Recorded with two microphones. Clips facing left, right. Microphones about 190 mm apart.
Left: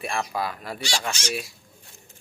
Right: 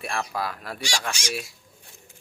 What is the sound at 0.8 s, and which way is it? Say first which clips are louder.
Speech: left 1 dB; 10° right (ahead or behind).